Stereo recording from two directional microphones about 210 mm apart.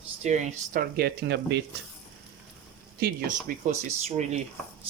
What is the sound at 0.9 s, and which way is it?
Speech, 50° right (ahead or behind).